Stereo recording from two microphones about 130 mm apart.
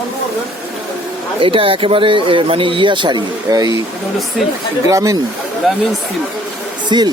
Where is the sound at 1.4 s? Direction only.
45° right (ahead or behind).